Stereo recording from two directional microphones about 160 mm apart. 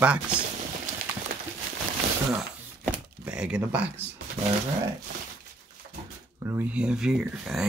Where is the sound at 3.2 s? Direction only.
5° right (ahead or behind).